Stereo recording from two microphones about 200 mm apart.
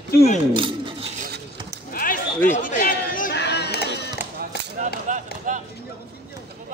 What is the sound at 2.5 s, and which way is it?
Run, 40° left (ahead or behind).